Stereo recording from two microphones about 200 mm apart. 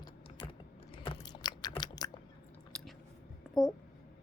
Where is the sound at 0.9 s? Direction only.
25° left (ahead or behind).